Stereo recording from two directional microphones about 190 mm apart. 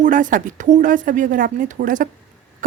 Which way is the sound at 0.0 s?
45° right (ahead or behind).